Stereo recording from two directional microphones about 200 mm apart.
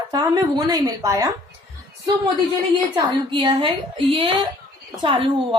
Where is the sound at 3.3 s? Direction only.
25° right (ahead or behind).